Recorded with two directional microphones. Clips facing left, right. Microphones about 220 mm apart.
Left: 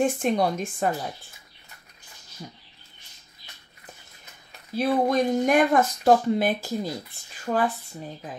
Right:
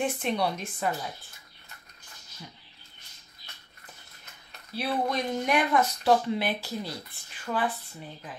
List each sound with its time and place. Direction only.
0.0 s speech: 45° left (ahead or behind)
4.7 s speech: 45° left (ahead or behind)